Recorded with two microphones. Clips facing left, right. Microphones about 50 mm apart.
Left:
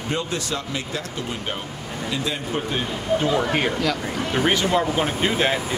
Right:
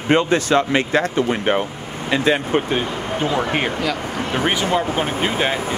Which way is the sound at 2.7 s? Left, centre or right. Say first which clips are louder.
Right 1 dB; right.